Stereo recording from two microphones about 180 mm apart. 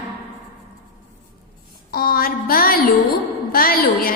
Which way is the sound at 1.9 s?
55° left (ahead or behind).